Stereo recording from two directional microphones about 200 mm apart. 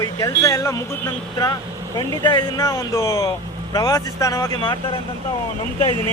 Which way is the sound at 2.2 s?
20° left (ahead or behind).